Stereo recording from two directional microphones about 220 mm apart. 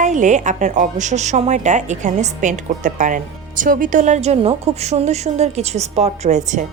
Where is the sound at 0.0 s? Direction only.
35° right (ahead or behind).